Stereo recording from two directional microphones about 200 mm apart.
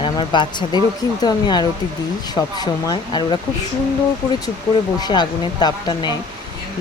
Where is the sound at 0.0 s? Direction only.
25° left (ahead or behind).